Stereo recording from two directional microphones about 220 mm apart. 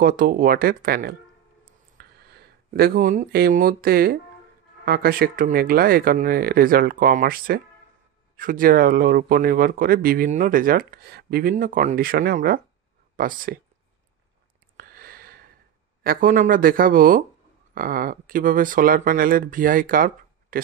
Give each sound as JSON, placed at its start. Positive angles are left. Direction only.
{"t": 0.0, "sound": "speech", "side_deg": -40}
{"t": 14.8, "sound": "a sound", "side_deg": -40}
{"t": 16.0, "sound": "speech", "side_deg": -40}